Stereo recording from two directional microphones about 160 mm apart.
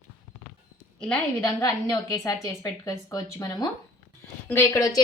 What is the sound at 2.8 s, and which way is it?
A woman's voice, 20° left (ahead or behind).